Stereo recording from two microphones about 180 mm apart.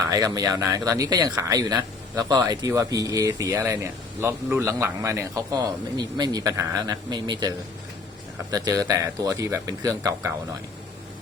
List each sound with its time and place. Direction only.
0.1 s speech: 20° right (ahead or behind)